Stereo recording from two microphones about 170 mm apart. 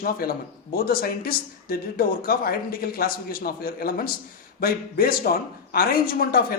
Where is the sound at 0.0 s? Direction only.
60° left (ahead or behind).